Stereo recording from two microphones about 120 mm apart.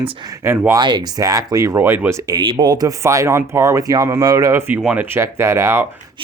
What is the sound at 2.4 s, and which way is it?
Speech, 40° right (ahead or behind).